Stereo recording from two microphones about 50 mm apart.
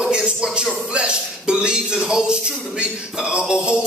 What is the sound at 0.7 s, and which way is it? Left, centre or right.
Speech, centre.